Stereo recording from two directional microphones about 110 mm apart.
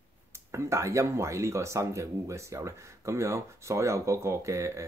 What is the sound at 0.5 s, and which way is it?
Speech, 25° right (ahead or behind).